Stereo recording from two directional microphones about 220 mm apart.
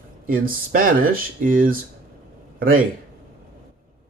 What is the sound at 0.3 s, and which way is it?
A man's voice, 40° right (ahead or behind).